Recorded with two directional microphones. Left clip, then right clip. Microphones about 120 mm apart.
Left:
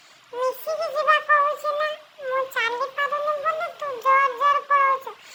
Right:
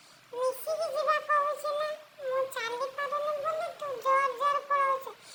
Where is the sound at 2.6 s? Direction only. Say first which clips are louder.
Left 9 dB; 55° left (ahead or behind).